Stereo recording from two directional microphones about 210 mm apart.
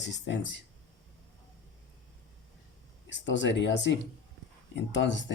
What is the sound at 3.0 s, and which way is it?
Speech, 60° left (ahead or behind).